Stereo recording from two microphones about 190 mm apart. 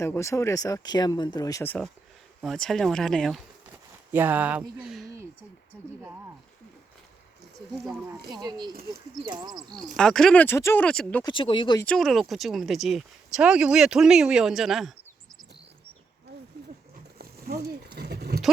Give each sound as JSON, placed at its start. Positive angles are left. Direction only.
{"t": 0.0, "sound": "speech", "side_deg": 15}
{"t": 4.1, "sound": "speech", "side_deg": -10}
{"t": 8.4, "sound": "speech", "side_deg": -20}
{"t": 8.7, "sound": "speech", "side_deg": -50}
{"t": 9.3, "sound": "speech", "side_deg": -20}
{"t": 9.9, "sound": "speech", "side_deg": 5}
{"t": 11.2, "sound": "speech", "side_deg": 25}
{"t": 11.8, "sound": "speech", "side_deg": 5}
{"t": 17.2, "sound": "speech", "side_deg": -55}